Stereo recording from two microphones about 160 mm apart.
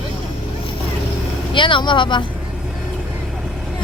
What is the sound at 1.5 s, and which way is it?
Speech, 30° left (ahead or behind).